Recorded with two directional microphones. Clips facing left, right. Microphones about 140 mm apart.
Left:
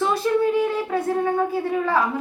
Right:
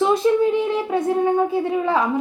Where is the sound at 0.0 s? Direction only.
20° right (ahead or behind).